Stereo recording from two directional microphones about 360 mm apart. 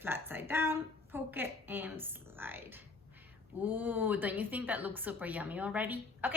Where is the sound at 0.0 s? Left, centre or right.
Centre.